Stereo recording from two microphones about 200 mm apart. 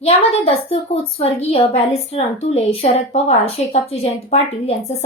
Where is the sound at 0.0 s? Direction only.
30° left (ahead or behind).